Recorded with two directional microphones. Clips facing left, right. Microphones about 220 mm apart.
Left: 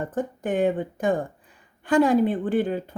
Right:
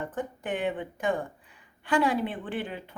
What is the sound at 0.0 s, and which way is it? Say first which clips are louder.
A woman's voice: left 6 dB; 40° left (ahead or behind).